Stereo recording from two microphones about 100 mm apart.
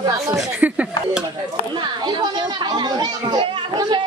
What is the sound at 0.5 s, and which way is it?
Speech, 15° right (ahead or behind).